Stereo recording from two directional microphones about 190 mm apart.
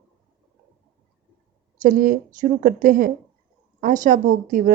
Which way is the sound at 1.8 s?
45° right (ahead or behind).